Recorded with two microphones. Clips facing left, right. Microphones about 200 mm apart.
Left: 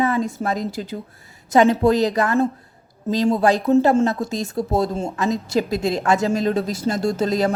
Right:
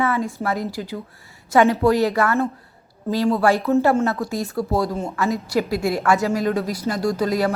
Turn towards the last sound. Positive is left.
turn(degrees=25)  # may be behind; listen again after turning